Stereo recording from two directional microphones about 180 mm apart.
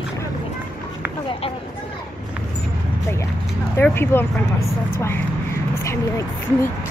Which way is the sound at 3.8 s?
15° left (ahead or behind).